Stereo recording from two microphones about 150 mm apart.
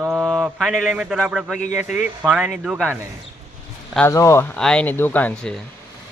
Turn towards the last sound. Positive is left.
turn(degrees=5)  # may be behind; listen again after turning